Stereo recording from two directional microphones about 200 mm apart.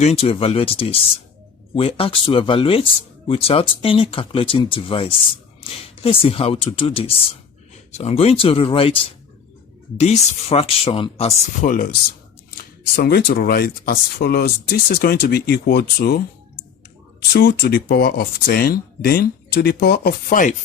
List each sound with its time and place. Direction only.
0.0 s speech: 30° left (ahead or behind)
13.0 s speech: 50° left (ahead or behind)
17.3 s speech: 55° left (ahead or behind)